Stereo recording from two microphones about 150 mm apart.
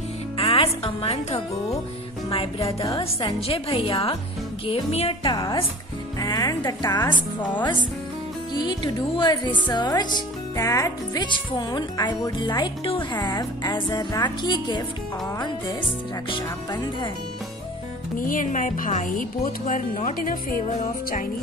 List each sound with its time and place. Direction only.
0.4 s speech: 40° left (ahead or behind)
2.9 s a woman's voice: 35° left (ahead or behind)
5.3 s speech: 25° left (ahead or behind)
8.5 s a woman's voice: 30° left (ahead or behind)
16.3 s a woman's voice: 35° left (ahead or behind)
18.2 s speech: 65° left (ahead or behind)
20.6 s speech: 55° left (ahead or behind)